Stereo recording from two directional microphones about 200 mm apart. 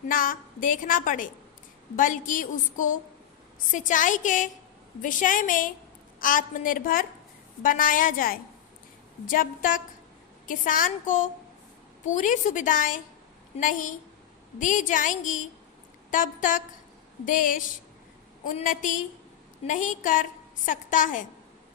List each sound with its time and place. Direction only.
0.1 s a woman's voice: 45° left (ahead or behind)